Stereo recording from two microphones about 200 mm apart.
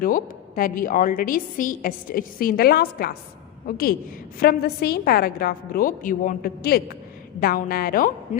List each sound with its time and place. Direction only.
0.0 s a woman's voice: 45° left (ahead or behind)